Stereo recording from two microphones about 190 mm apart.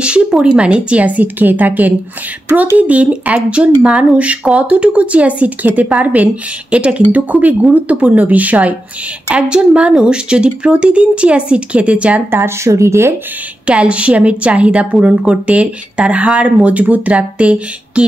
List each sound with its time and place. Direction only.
0.0 s speech: 5° right (ahead or behind)